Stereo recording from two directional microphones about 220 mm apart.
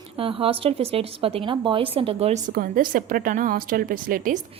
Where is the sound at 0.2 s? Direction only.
25° right (ahead or behind).